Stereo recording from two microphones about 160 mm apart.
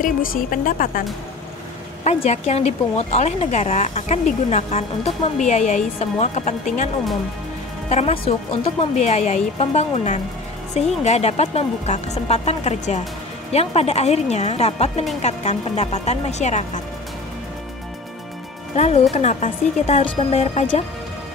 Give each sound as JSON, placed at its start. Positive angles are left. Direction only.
{"t": 0.0, "sound": "speech", "side_deg": 60}
{"t": 2.0, "sound": "speech", "side_deg": 45}
{"t": 7.9, "sound": "speech", "side_deg": 40}
{"t": 18.8, "sound": "speech", "side_deg": 40}